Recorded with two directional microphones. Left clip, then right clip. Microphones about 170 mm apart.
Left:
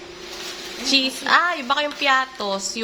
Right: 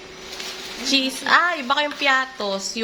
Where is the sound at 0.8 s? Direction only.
Centre (ahead or behind).